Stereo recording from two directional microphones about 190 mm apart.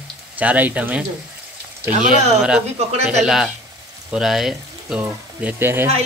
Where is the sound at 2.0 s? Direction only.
40° right (ahead or behind).